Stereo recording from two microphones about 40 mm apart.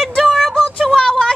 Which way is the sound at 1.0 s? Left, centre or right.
Centre.